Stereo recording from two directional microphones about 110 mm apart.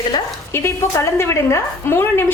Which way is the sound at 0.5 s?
25° left (ahead or behind).